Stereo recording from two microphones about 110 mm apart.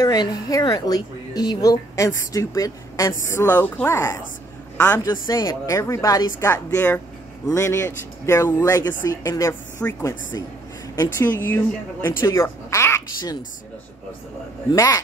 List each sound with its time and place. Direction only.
0.0 s a woman's voice: 35° left (ahead or behind); by 5.1 s 15° left (ahead or behind)
5.1 s speech: 35° left (ahead or behind)
11.0 s speech: 20° left (ahead or behind)
14.7 s speech: 35° left (ahead or behind)